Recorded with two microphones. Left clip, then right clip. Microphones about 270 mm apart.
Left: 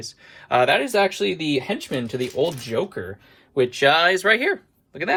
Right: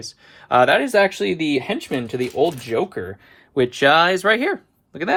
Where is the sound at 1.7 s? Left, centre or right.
Right; by 4.5 s centre.